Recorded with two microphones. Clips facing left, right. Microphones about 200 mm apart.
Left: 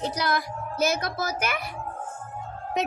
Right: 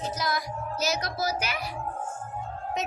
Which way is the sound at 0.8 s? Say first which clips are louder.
Left 4 dB; 55° left (ahead or behind).